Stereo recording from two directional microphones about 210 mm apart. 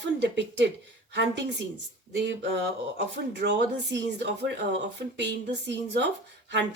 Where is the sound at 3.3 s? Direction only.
55° right (ahead or behind).